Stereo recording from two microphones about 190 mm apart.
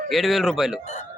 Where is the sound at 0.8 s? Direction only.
40° left (ahead or behind).